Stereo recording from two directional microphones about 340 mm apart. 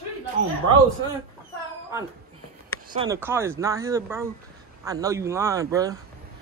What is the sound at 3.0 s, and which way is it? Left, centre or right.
Speech, centre.